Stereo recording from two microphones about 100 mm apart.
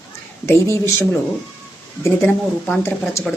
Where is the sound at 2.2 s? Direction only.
25° left (ahead or behind).